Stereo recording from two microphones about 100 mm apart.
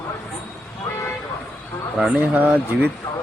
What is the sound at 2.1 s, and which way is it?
Speech, 20° right (ahead or behind).